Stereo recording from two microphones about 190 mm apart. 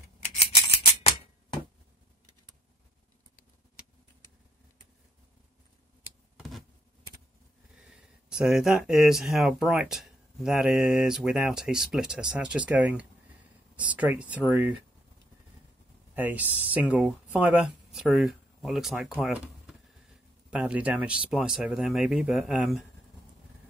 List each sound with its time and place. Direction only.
0.7 s scissors: 30° left (ahead or behind)
6.3 s a sound: centre (ahead or behind)
7.8 s speech: 5° right (ahead or behind)
16.2 s speech: 10° right (ahead or behind)